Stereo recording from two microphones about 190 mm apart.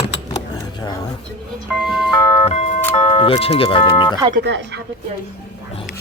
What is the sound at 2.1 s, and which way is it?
Music, 15° left (ahead or behind).